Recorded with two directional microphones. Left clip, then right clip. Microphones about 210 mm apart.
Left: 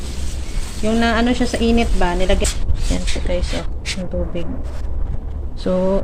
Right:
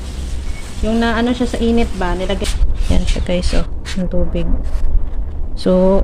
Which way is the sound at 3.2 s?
50° right (ahead or behind).